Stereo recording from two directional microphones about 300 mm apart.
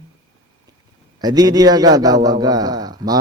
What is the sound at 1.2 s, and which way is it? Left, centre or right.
A man's voice, centre.